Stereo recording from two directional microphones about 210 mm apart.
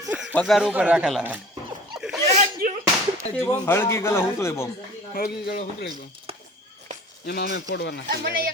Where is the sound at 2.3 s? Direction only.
35° right (ahead or behind).